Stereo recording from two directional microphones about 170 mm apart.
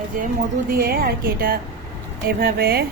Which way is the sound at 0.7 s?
60° right (ahead or behind).